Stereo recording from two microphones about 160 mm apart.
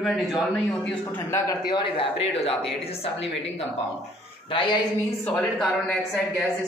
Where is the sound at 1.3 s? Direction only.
25° left (ahead or behind).